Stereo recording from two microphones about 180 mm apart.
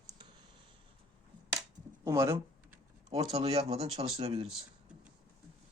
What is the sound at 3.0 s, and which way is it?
Speech, 35° right (ahead or behind).